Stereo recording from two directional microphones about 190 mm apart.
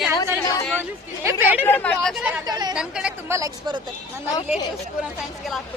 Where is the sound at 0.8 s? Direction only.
10° right (ahead or behind).